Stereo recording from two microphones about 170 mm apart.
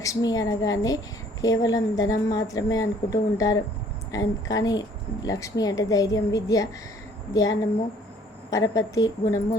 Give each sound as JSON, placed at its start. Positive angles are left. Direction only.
{"t": 0.0, "sound": "a woman's voice", "side_deg": 20}
{"t": 8.4, "sound": "a woman's voice", "side_deg": 20}